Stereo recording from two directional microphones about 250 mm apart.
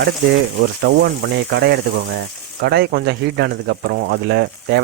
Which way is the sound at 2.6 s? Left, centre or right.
Right.